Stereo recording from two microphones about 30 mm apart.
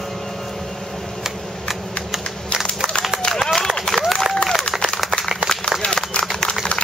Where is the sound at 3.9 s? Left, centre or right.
Centre.